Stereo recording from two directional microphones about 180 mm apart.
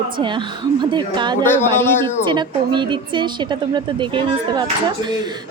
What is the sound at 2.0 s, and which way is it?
A woman's voice, 25° right (ahead or behind).